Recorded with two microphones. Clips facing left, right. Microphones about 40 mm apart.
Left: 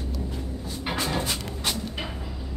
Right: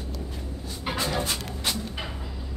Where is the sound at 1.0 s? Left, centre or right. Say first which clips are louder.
Right 1 dB; centre.